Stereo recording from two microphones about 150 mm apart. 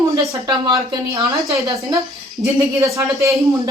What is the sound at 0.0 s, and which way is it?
Speech, 20° right (ahead or behind).